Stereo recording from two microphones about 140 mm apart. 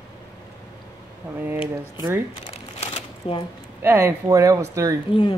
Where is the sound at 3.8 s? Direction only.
20° right (ahead or behind).